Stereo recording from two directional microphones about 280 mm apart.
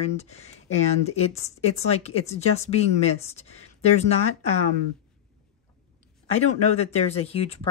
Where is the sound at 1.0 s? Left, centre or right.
Left.